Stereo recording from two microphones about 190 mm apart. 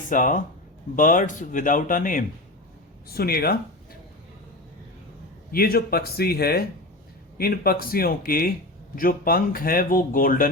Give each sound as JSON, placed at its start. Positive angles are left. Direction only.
{"t": 0.1, "sound": "speech", "side_deg": 45}
{"t": 5.5, "sound": "speech", "side_deg": 50}